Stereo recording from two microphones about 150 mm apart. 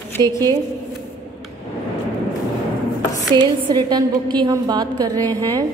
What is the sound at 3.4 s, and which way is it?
A woman's voice, 30° right (ahead or behind).